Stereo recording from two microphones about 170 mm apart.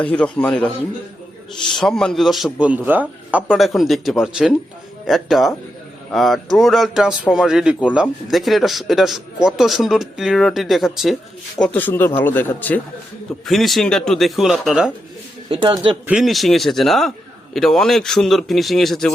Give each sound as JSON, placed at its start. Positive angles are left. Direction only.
{"t": 0.0, "sound": "speech", "side_deg": 5}
{"t": 1.7, "sound": "speech", "side_deg": 5}
{"t": 11.6, "sound": "speech", "side_deg": 10}
{"t": 15.4, "sound": "speech", "side_deg": -30}
{"t": 16.0, "sound": "speech", "side_deg": 0}